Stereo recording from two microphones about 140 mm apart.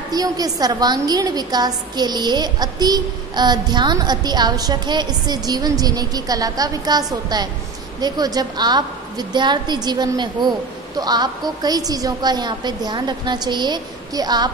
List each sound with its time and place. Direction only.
0.1 s a woman's voice: 25° right (ahead or behind)